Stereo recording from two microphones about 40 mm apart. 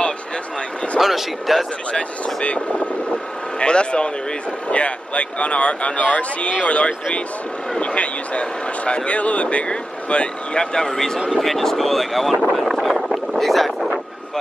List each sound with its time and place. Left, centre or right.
0.9 s speech: centre
1.9 s speech: left
11.3 s speech: centre
12.5 s boat: centre